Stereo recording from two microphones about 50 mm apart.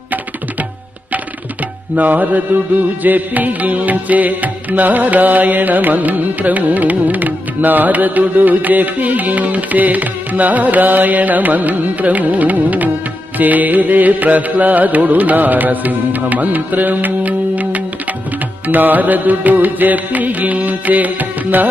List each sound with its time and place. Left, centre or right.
2.0 s music: right